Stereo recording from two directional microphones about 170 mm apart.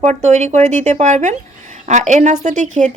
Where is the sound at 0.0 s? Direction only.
40° right (ahead or behind).